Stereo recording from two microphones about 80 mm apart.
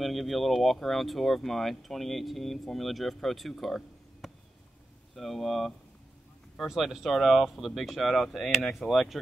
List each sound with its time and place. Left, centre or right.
0.0 s speech: centre